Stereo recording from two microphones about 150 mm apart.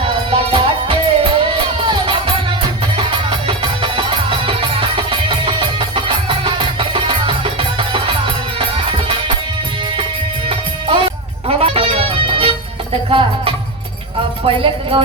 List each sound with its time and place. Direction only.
0.0 s music: 35° right (ahead or behind)
10.5 s music: 40° right (ahead or behind)
14.4 s speech: 35° right (ahead or behind)